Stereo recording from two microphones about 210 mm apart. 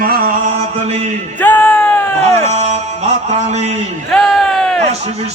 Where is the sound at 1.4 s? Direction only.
5° left (ahead or behind).